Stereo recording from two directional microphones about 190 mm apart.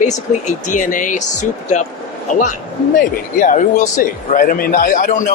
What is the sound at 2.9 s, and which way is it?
A man's voice, 45° left (ahead or behind).